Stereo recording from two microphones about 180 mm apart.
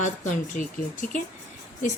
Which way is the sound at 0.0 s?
45° left (ahead or behind).